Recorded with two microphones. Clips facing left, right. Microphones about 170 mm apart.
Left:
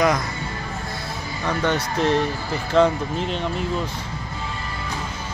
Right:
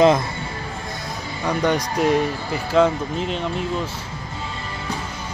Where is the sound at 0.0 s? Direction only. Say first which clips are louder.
Right 5 dB; 25° right (ahead or behind).